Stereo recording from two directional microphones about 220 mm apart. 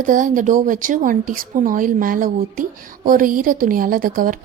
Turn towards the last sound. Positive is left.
turn(degrees=-40)  # may be behind; listen again after turning